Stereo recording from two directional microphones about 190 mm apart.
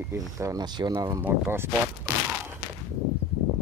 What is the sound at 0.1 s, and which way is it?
Speech, 15° right (ahead or behind).